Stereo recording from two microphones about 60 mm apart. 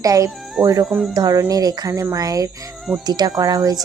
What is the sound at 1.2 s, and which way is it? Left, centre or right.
A woman's voice, right.